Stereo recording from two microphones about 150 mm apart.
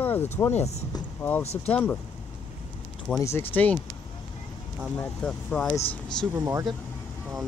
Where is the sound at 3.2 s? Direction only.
15° left (ahead or behind).